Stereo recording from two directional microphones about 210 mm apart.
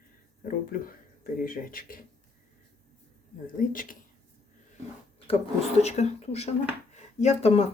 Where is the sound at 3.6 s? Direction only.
40° left (ahead or behind).